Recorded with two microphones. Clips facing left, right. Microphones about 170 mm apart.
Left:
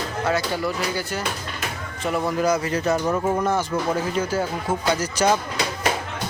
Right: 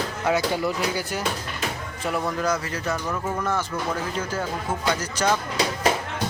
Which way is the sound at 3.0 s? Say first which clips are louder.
Left 6 dB; 30° left (ahead or behind).